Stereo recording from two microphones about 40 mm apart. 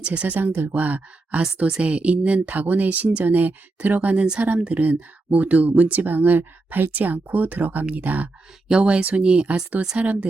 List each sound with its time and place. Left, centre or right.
0.0 s speech: right
0.3 s speech: right
0.8 s speech: right
8.6 s speech: right